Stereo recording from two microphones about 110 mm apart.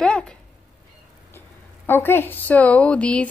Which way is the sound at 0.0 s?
10° left (ahead or behind).